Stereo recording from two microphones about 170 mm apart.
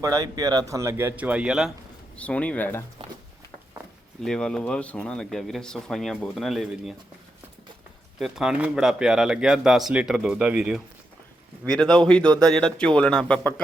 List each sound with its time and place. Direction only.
0.0 s a man's voice: 20° right (ahead or behind); by 1.7 s 5° right (ahead or behind)
2.1 s speech: 10° left (ahead or behind)
4.2 s speech: 5° left (ahead or behind)
8.2 s speech: 5° right (ahead or behind)